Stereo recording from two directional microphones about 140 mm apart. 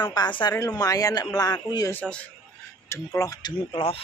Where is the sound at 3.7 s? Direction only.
40° left (ahead or behind).